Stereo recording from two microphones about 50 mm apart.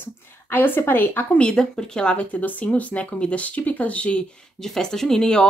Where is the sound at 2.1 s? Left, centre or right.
Left.